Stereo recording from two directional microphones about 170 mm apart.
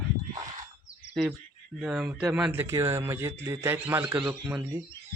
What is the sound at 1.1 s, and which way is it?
A man's voice, 5° right (ahead or behind).